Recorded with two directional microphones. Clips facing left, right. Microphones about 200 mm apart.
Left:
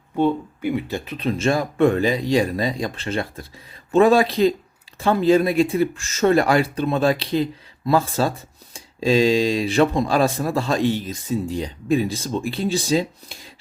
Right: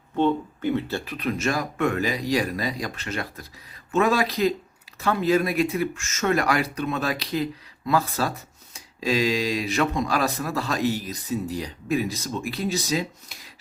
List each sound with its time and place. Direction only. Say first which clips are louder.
0.2 s speech: left 2 dB; 10° left (ahead or behind); by 13.5 s 30° left (ahead or behind)